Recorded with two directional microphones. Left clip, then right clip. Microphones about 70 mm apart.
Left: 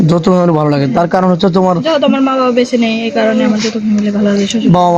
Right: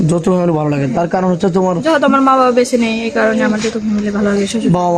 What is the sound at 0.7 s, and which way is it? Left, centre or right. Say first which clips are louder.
A man's voice: left 4 dB; left.